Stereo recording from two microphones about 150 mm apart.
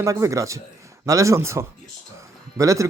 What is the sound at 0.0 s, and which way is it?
A man's voice, 20° right (ahead or behind).